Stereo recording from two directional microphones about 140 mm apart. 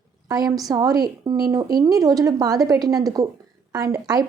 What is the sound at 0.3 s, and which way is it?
Speech, 25° right (ahead or behind).